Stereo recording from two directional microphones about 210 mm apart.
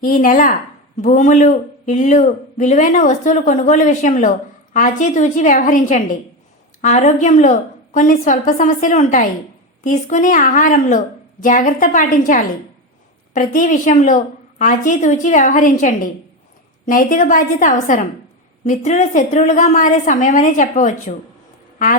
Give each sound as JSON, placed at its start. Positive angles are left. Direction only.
{"t": 0.0, "sound": "speech", "side_deg": 40}